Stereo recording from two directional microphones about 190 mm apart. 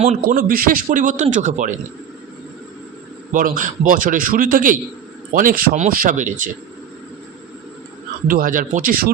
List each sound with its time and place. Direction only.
0.0 s a man's voice: 35° right (ahead or behind)
0.3 s a man's voice: 50° right (ahead or behind)
3.3 s a man's voice: 45° right (ahead or behind)
8.3 s a man's voice: 45° right (ahead or behind)